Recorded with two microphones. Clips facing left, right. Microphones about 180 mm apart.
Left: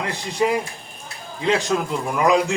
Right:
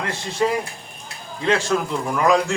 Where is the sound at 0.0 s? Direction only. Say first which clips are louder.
Even; 15° left (ahead or behind).